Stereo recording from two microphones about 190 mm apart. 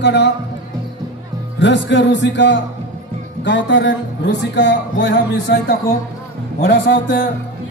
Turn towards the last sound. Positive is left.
turn(degrees=55)  # may be behind; listen again after turning